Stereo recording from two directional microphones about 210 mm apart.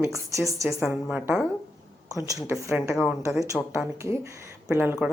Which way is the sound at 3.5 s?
Centre (ahead or behind).